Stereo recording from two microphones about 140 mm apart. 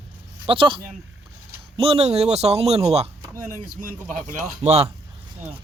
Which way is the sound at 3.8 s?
70° right (ahead or behind).